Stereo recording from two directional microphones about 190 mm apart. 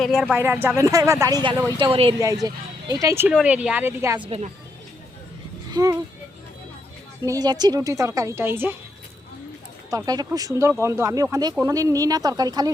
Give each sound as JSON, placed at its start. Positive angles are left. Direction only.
{"t": 0.0, "sound": "speech", "side_deg": -5}
{"t": 2.1, "sound": "speech", "side_deg": -20}
{"t": 4.3, "sound": "a woman's voice", "side_deg": -35}
{"t": 5.7, "sound": "speech", "side_deg": -20}
{"t": 7.3, "sound": "speech", "side_deg": -20}
{"t": 9.9, "sound": "speech", "side_deg": -20}